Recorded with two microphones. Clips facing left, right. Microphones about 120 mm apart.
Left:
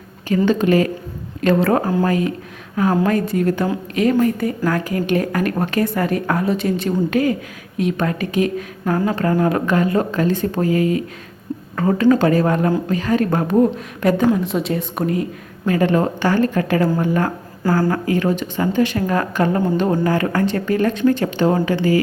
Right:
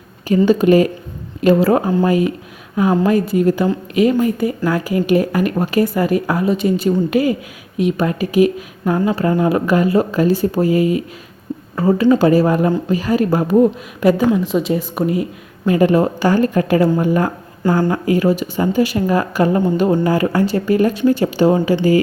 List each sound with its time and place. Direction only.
0.3 s a woman's voice: 10° right (ahead or behind)